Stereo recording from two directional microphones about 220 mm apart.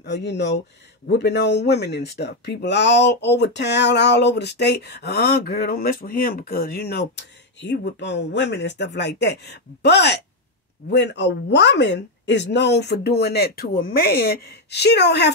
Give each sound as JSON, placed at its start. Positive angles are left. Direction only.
{"t": 0.0, "sound": "speech", "side_deg": 50}